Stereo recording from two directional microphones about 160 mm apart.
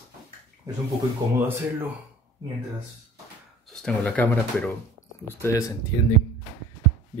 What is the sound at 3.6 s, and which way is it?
Speech, 5° left (ahead or behind).